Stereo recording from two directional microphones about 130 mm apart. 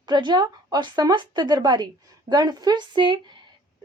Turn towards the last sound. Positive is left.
turn(degrees=-35)  # may be behind; listen again after turning